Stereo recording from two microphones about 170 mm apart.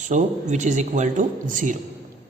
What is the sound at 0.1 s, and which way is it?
A man's voice, 45° right (ahead or behind).